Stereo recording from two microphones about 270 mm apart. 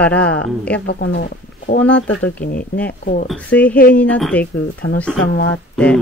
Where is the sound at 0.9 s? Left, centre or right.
Left.